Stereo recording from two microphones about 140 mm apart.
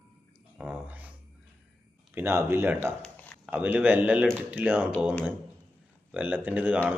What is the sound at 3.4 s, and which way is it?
Speech, 10° right (ahead or behind).